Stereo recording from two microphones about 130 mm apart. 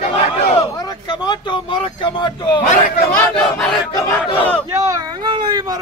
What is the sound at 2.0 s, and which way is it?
Speech, 35° left (ahead or behind).